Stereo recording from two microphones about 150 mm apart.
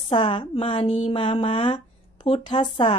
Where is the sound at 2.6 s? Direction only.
40° left (ahead or behind).